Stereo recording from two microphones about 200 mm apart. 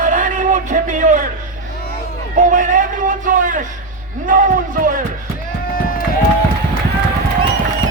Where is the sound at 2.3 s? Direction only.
40° right (ahead or behind).